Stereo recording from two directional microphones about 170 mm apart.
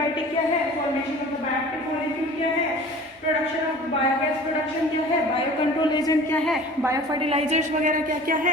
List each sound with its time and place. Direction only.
5.9 s speech: 20° left (ahead or behind)
6.3 s a woman's voice: 5° left (ahead or behind)
6.8 s a woman's voice: 20° right (ahead or behind)
7.2 s a woman's voice: 35° right (ahead or behind)
7.9 s speech: 50° right (ahead or behind)